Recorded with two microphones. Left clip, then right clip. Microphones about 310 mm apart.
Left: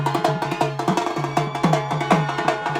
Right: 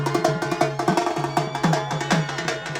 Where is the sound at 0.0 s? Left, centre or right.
Centre.